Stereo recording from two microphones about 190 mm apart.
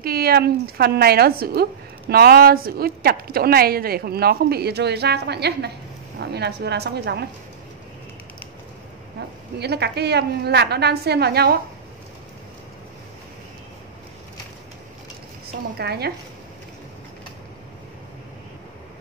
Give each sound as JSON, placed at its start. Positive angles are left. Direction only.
{"t": 0.0, "sound": "a woman's voice", "side_deg": -55}
{"t": 9.6, "sound": "a woman's voice", "side_deg": -60}
{"t": 15.8, "sound": "a woman's voice", "side_deg": -60}